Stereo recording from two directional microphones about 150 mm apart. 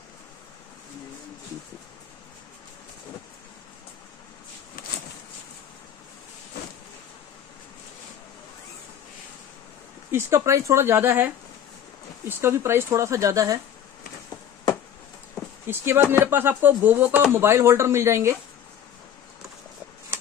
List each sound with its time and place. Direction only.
4.8 s a sound: 70° left (ahead or behind)
10.1 s speech: 20° right (ahead or behind)
15.6 s speech: 15° right (ahead or behind)